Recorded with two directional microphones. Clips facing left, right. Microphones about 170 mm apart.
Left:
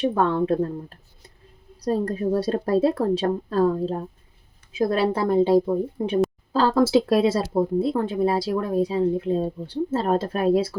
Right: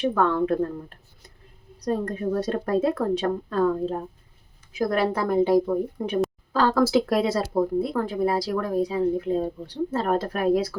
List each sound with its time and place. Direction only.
0.0 s speech: 25° left (ahead or behind)
1.8 s speech: 35° left (ahead or behind)